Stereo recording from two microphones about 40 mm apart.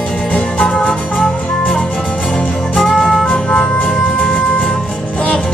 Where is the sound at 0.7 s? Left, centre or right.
Left.